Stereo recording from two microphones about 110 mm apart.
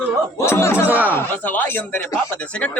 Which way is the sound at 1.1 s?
20° left (ahead or behind).